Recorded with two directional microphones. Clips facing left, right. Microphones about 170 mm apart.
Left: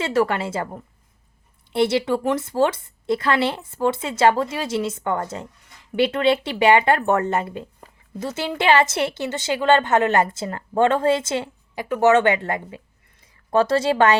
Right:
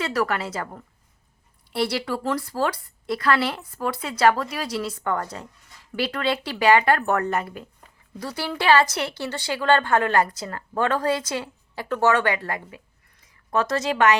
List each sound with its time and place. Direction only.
0.0 s speech: 25° left (ahead or behind)